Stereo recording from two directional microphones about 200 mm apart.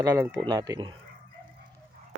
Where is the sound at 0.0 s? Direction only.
15° right (ahead or behind).